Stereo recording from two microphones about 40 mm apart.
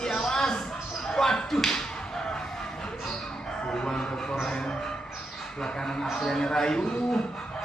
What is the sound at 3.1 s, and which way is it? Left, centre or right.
Chicken, centre.